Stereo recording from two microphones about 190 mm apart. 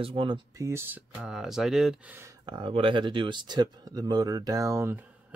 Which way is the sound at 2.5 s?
25° right (ahead or behind).